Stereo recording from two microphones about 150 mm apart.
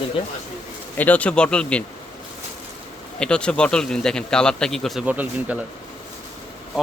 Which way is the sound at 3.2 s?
5° left (ahead or behind).